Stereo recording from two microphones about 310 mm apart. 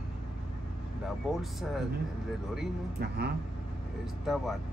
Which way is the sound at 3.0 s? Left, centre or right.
Right.